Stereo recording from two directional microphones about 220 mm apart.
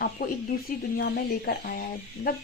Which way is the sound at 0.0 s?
40° left (ahead or behind).